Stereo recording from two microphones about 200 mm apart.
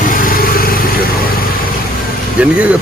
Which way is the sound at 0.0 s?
40° left (ahead or behind).